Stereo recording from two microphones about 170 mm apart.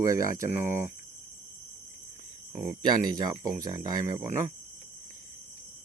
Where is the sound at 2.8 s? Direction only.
25° right (ahead or behind).